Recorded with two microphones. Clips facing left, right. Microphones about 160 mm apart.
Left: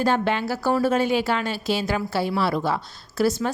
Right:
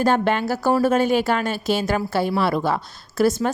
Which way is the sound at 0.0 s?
50° right (ahead or behind).